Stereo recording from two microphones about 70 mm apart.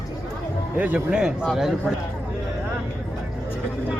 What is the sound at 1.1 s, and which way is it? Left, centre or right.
Speech, centre.